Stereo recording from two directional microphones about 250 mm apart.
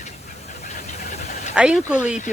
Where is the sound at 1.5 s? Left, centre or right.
Centre.